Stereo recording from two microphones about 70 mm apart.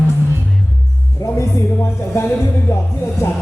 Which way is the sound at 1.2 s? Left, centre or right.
Left.